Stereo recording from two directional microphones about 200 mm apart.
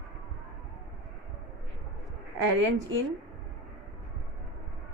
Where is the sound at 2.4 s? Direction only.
65° right (ahead or behind).